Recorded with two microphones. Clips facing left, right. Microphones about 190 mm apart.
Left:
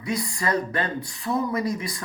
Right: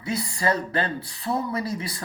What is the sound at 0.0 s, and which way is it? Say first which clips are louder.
Speech: right 1 dB; 30° right (ahead or behind).